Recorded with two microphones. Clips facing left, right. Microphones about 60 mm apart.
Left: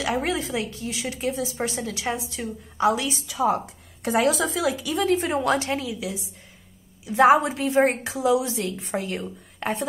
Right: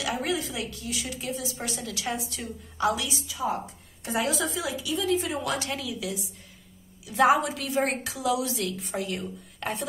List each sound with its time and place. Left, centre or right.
0.0 s a woman's voice: left
3.1 s a woman's voice: left
4.8 s a woman's voice: left